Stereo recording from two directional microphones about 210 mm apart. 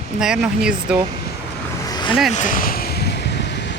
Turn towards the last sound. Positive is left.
turn(degrees=55)  # may be behind; listen again after turning